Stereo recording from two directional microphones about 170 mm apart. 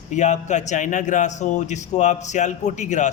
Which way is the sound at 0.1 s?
45° left (ahead or behind).